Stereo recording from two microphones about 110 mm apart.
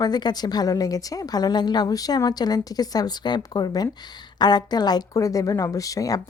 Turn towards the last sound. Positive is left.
turn(degrees=30)  # may be behind; listen again after turning